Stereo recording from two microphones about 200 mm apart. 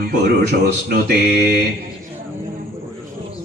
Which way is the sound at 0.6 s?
50° right (ahead or behind).